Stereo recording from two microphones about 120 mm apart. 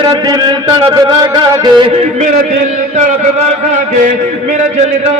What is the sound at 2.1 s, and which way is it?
Speech, 90° right.